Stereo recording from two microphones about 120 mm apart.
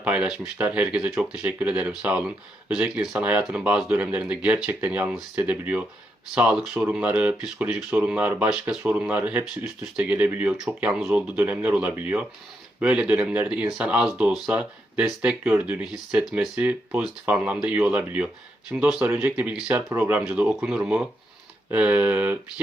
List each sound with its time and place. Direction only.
0.0 s speech: 10° right (ahead or behind)